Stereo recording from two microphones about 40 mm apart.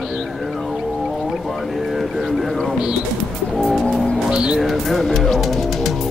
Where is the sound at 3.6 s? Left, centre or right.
Centre.